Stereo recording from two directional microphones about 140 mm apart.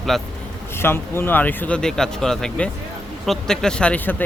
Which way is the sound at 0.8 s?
15° left (ahead or behind).